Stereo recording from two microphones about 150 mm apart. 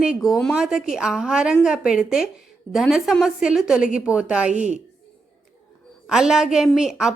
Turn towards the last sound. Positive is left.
turn(degrees=-5)  # may be behind; listen again after turning